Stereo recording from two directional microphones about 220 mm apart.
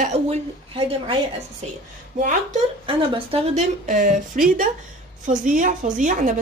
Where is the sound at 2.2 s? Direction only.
30° right (ahead or behind).